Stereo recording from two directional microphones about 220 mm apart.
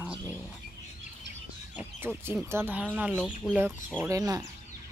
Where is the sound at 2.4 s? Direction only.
10° right (ahead or behind).